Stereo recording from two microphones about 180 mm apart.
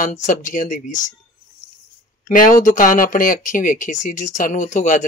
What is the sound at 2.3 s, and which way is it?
Speech, 50° left (ahead or behind).